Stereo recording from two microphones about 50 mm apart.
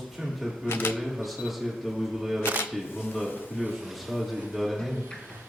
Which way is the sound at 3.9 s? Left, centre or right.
Centre.